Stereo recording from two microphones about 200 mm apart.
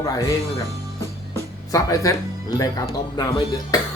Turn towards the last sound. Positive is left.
turn(degrees=20)  # may be behind; listen again after turning